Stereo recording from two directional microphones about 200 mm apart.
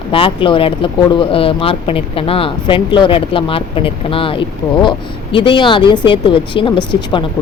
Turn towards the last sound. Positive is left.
turn(degrees=25)  # may be behind; listen again after turning